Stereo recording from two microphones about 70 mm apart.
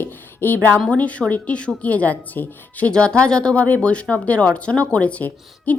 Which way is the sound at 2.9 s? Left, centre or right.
Centre.